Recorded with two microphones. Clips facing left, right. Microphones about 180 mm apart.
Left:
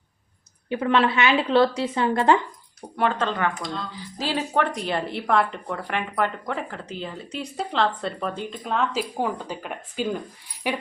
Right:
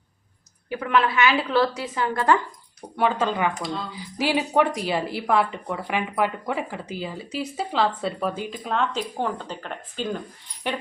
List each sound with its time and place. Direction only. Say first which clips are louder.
0.7 s a woman's voice: left 2 dB; 30° left (ahead or behind)
2.9 s speech: right 1 dB; 5° right (ahead or behind)